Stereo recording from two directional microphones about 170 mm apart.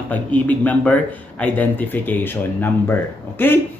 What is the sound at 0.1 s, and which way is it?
A man's voice, 10° left (ahead or behind).